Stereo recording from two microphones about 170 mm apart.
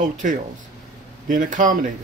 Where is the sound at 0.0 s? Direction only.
50° right (ahead or behind).